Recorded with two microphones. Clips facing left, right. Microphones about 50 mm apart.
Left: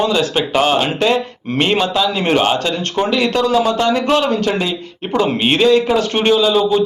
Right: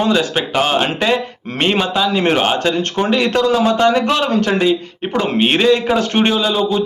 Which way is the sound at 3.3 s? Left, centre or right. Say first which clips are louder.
Right 1 dB; right.